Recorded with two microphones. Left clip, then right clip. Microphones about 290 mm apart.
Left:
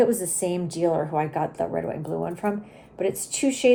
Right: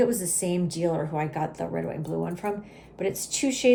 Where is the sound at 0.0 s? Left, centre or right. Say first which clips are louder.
Left 3 dB; centre.